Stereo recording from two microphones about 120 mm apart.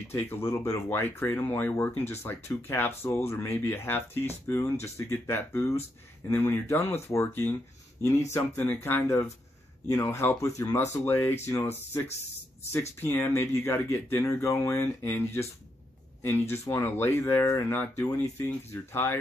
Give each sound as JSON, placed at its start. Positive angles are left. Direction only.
{"t": 0.1, "sound": "speech", "side_deg": 20}
{"t": 13.0, "sound": "speech", "side_deg": 20}